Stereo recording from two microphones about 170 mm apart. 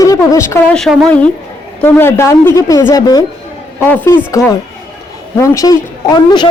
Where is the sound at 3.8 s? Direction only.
10° left (ahead or behind).